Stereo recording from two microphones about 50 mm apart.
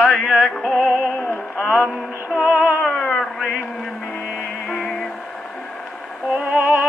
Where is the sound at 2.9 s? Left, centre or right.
Centre.